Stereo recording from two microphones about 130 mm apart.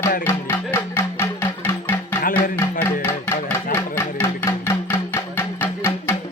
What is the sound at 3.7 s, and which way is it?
Music, 20° left (ahead or behind).